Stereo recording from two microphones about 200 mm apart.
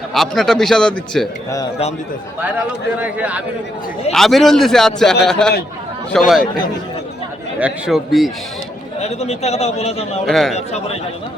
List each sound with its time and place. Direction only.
0.1 s a man's voice: centre (ahead or behind)
2.4 s a man's voice: 5° right (ahead or behind)
7.6 s a man's voice: centre (ahead or behind)
9.0 s a man's voice: 30° left (ahead or behind)
10.2 s a man's voice: centre (ahead or behind)
10.5 s a man's voice: 35° left (ahead or behind)